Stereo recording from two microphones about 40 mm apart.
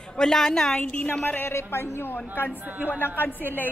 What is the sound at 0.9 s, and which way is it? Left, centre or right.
Speech, left.